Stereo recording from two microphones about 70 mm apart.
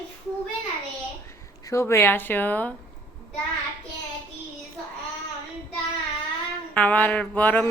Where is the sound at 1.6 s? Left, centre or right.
Left.